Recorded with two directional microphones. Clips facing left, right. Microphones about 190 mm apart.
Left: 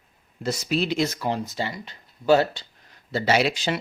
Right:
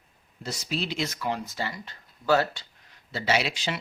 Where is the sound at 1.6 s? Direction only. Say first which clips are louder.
Left 4 dB; 20° left (ahead or behind).